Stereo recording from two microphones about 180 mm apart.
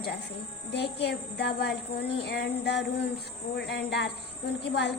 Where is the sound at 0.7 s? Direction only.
70° left (ahead or behind).